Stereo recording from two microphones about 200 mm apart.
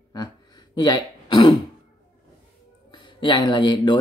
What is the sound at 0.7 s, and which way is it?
Throat clearing, 20° left (ahead or behind).